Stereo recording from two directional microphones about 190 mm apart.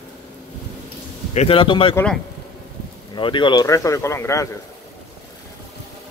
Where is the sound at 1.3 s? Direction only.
30° left (ahead or behind).